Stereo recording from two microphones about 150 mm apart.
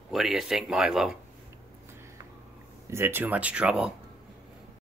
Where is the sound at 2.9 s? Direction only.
15° right (ahead or behind).